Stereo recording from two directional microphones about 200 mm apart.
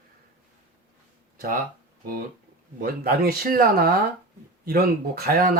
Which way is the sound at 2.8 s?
50° right (ahead or behind).